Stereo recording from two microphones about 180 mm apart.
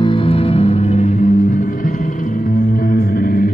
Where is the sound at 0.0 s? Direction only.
30° left (ahead or behind).